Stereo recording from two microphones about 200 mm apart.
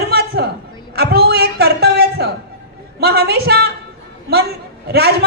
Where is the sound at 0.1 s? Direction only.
55° right (ahead or behind).